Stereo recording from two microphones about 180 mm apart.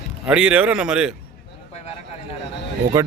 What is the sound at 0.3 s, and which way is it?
Speech, 5° right (ahead or behind).